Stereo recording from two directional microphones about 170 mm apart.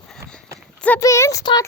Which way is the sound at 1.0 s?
20° left (ahead or behind).